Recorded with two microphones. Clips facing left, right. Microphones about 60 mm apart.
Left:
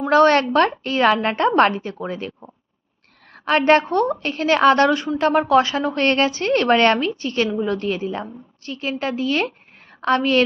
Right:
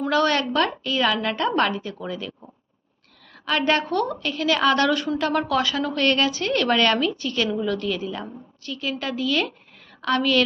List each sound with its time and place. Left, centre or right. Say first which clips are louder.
0.1 s a woman's voice: left 8 dB; left